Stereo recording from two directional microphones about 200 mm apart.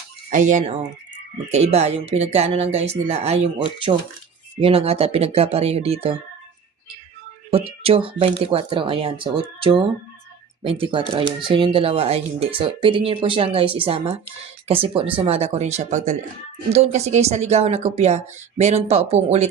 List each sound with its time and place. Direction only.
0.3 s speech: 40° right (ahead or behind)
7.5 s speech: 30° right (ahead or behind)